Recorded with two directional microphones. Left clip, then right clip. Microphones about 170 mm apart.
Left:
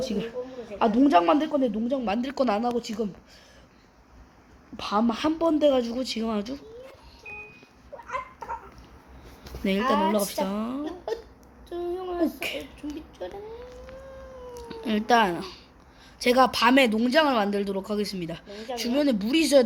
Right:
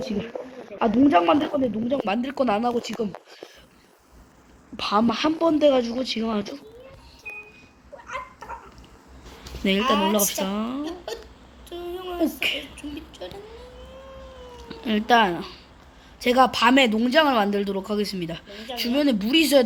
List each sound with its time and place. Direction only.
0.8 s speech: 10° left (ahead or behind)
2.0 s speech: centre (ahead or behind)
4.8 s a woman's voice: 10° right (ahead or behind)
5.1 s speech: 10° left (ahead or behind)
8.0 s a sound: 40° left (ahead or behind)
10.1 s speech: 5° left (ahead or behind)
10.8 s speech: 45° left (ahead or behind)
11.7 s a sound: 45° left (ahead or behind)
12.2 s speech: 5° left (ahead or behind)
14.6 s a woman's voice: 5° left (ahead or behind)